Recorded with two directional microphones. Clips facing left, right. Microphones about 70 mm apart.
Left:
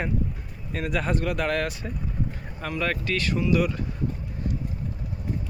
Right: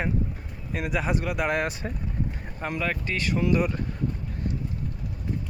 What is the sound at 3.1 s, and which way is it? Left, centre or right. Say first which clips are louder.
Speech: left 2 dB; right.